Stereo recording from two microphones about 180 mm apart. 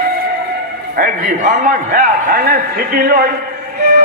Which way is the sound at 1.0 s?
50° right (ahead or behind).